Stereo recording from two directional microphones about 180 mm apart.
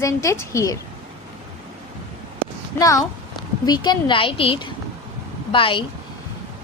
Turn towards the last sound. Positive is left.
turn(degrees=30)  # may be behind; listen again after turning